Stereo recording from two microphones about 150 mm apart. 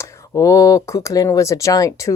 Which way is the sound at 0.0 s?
20° left (ahead or behind).